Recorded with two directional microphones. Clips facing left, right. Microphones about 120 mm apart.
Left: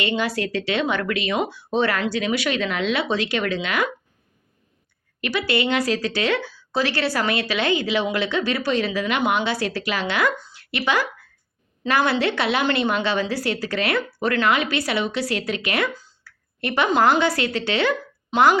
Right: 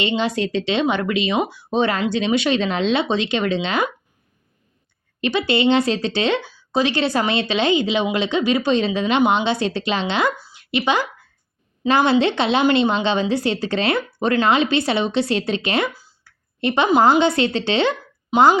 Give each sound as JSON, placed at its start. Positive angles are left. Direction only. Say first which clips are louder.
{"t": 0.0, "sound": "speech", "louder": "right 3 dB", "side_deg": -20}
{"t": 5.2, "sound": "speech", "louder": "right 5 dB", "side_deg": -25}
{"t": 10.5, "sound": "a sound", "louder": "right 3 dB", "side_deg": -20}
{"t": 11.9, "sound": "speech", "louder": "right 4 dB", "side_deg": -25}
{"t": 16.0, "sound": "a sound", "louder": "left 1 dB", "side_deg": -10}
{"t": 16.6, "sound": "speech", "louder": "right 3 dB", "side_deg": -20}